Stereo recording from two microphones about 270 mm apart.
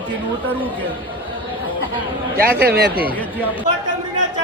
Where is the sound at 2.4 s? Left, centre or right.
Right.